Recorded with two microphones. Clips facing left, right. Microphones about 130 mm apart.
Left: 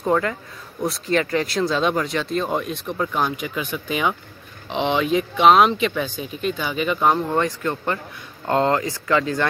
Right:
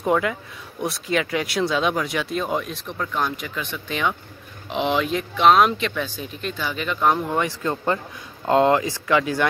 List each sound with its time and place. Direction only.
0.0 s speech: 10° right (ahead or behind); by 4.1 s 10° left (ahead or behind)
4.6 s speech: centre (ahead or behind)
7.6 s a man's voice: 20° right (ahead or behind)